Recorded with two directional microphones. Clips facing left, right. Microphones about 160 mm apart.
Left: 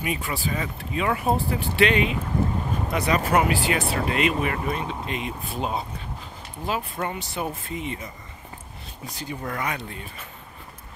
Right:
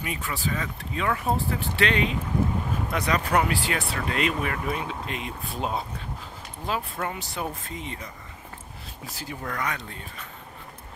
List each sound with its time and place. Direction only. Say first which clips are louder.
0.0 s speech: left 3 dB; 15° left (ahead or behind)
3.8 s speech: left 5 dB; 25° left (ahead or behind)
4.1 s speech: left 2 dB; 5° left (ahead or behind)
4.6 s speech: left 2 dB; 5° right (ahead or behind)
9.4 s speech: left 1 dB; 10° left (ahead or behind)